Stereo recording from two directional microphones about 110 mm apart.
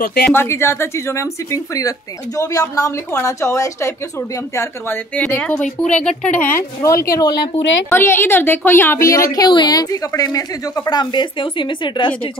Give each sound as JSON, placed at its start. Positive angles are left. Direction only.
{"t": 0.3, "sound": "speech", "side_deg": 20}
{"t": 6.8, "sound": "speech", "side_deg": 30}
{"t": 7.9, "sound": "a woman's voice", "side_deg": 20}